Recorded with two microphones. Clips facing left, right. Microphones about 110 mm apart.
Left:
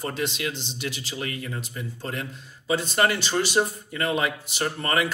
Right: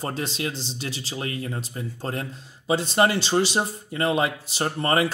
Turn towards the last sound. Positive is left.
turn(degrees=-30)  # may be behind; listen again after turning